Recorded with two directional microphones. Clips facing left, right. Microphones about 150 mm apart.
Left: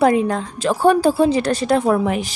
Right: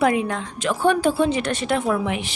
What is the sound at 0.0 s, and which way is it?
A woman's voice, 35° left (ahead or behind).